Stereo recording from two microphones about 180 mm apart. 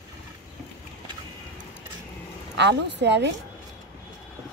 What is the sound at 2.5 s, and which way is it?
Speech, 70° right (ahead or behind).